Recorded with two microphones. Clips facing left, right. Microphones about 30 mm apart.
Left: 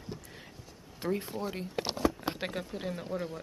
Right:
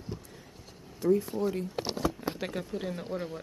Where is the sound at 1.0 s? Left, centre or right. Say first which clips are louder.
Right 7 dB; left.